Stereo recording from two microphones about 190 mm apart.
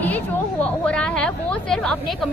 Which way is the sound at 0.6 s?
5° left (ahead or behind).